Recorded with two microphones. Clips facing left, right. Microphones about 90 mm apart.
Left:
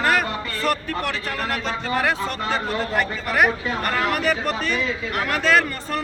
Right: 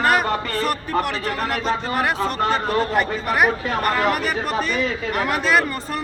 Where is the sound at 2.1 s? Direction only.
55° right (ahead or behind).